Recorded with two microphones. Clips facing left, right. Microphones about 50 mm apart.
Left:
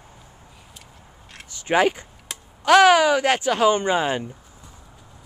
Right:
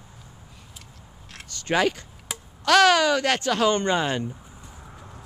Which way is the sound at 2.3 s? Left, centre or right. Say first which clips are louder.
Right 2 dB; centre.